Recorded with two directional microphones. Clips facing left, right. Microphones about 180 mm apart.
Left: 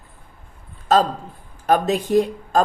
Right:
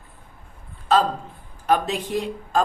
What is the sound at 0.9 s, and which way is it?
Speech, 40° left (ahead or behind).